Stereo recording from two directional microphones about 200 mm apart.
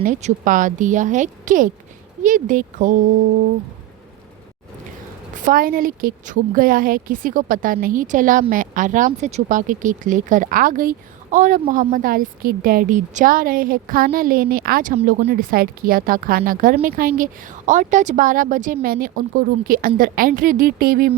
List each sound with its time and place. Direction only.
0.0 s a woman's voice: 35° right (ahead or behind)
5.4 s a woman's voice: 40° right (ahead or behind)
14.9 s a woman's voice: 30° right (ahead or behind)
15.3 s speech: 45° right (ahead or behind)